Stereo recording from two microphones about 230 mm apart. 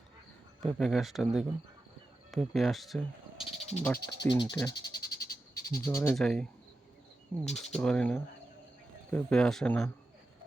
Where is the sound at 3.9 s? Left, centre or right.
Left.